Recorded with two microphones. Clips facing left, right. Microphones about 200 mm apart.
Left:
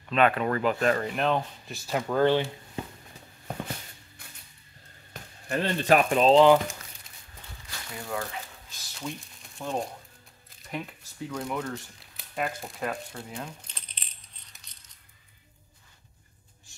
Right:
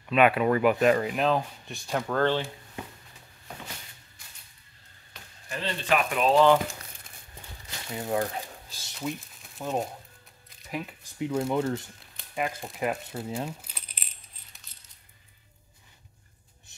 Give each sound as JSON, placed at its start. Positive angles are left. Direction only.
{"t": 0.1, "sound": "speech", "side_deg": -10}
{"t": 1.1, "sound": "speech", "side_deg": 0}
{"t": 4.2, "sound": "mechanisms", "side_deg": 55}
{"t": 5.5, "sound": "speech", "side_deg": 50}
{"t": 7.6, "sound": "a sound", "side_deg": -25}
{"t": 9.0, "sound": "speech", "side_deg": -5}
{"t": 11.1, "sound": "speech", "side_deg": -25}
{"t": 12.2, "sound": "speech", "side_deg": 0}
{"t": 12.8, "sound": "speech", "side_deg": -25}
{"t": 13.5, "sound": "coin", "side_deg": -5}